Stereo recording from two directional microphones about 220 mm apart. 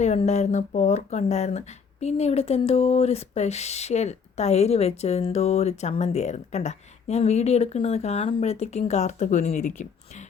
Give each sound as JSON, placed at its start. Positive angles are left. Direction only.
{"t": 0.0, "sound": "speech", "side_deg": 30}